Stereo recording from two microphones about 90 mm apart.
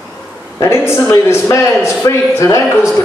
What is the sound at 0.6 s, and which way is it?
Speech, 30° left (ahead or behind).